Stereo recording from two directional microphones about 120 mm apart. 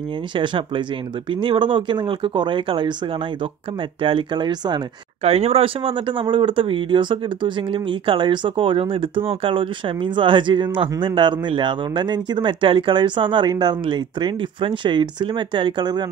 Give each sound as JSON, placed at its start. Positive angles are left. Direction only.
{"t": 0.4, "sound": "speech", "side_deg": -45}
{"t": 4.0, "sound": "speech", "side_deg": -40}
{"t": 5.2, "sound": "speech", "side_deg": -60}